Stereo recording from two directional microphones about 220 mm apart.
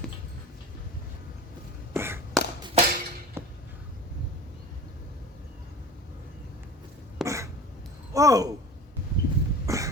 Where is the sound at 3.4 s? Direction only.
10° right (ahead or behind).